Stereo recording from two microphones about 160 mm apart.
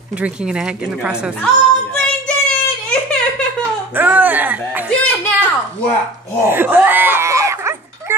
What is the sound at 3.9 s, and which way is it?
A woman's voice, 10° right (ahead or behind).